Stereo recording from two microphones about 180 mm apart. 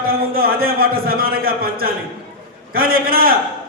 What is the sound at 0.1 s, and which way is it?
A man's voice, 55° right (ahead or behind).